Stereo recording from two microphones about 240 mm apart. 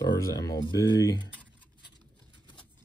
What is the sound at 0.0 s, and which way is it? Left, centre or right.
Speech, centre.